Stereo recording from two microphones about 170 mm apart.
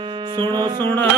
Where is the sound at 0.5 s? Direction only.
25° right (ahead or behind).